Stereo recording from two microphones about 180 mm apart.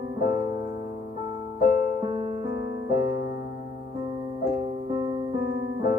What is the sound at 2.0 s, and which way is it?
Music, 25° right (ahead or behind).